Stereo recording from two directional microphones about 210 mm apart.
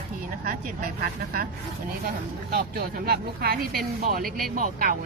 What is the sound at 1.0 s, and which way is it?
Speech, 45° right (ahead or behind).